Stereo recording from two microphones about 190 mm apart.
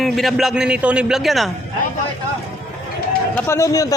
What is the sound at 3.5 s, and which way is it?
Speech, 15° left (ahead or behind).